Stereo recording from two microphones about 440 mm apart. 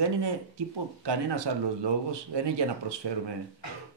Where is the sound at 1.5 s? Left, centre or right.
Right.